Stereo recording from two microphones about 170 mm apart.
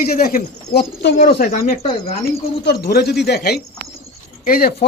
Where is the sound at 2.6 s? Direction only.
65° left (ahead or behind).